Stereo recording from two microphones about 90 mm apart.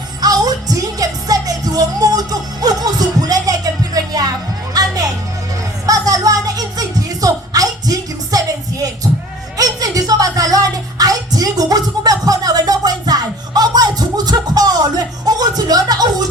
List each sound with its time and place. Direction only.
0.2 s music: 45° right (ahead or behind)
9.6 s music: 45° right (ahead or behind)